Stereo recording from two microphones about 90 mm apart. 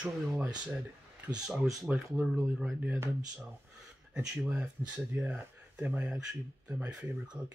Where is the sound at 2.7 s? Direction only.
20° right (ahead or behind).